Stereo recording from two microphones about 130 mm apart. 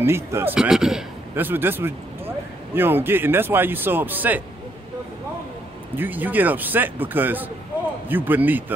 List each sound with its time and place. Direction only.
0.0 s speech: 20° right (ahead or behind)
0.6 s a man's voice: 5° right (ahead or behind)
1.3 s speech: 15° right (ahead or behind)
5.9 s a man's voice: 15° right (ahead or behind)